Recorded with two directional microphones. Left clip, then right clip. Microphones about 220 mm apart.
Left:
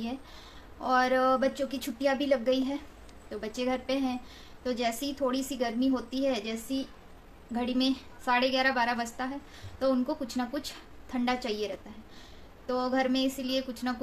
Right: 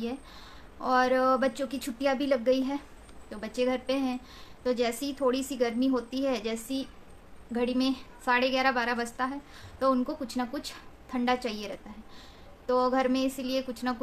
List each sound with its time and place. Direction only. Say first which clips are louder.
0.7 s a woman's voice: right 1 dB; 10° right (ahead or behind)